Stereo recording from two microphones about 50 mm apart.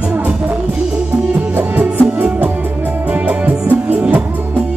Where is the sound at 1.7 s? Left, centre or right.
Right.